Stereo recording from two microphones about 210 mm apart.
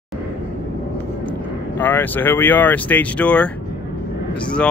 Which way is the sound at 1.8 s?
10° left (ahead or behind).